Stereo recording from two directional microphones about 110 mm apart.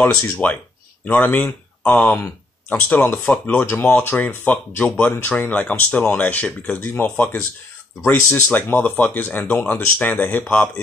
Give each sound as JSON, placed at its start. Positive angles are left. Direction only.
{"t": 0.0, "sound": "speech", "side_deg": 15}
{"t": 8.3, "sound": "speech", "side_deg": 15}